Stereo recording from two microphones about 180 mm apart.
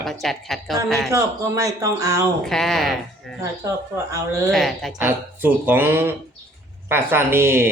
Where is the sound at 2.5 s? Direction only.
Centre (ahead or behind).